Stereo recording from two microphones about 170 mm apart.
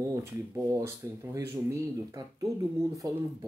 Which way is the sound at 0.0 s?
20° right (ahead or behind).